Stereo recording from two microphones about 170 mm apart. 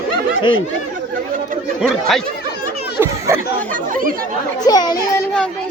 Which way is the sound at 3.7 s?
50° right (ahead or behind).